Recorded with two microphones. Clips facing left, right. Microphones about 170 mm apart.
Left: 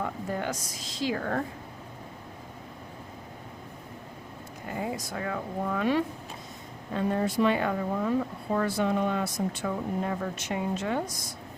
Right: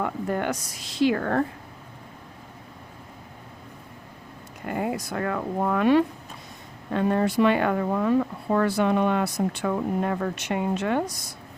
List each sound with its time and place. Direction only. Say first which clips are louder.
0.0 s speech: right 5 dB; 65° right (ahead or behind)
4.7 s speech: right 5 dB; 65° right (ahead or behind)